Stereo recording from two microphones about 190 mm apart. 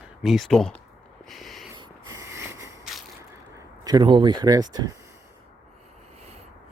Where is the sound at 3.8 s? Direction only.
25° right (ahead or behind).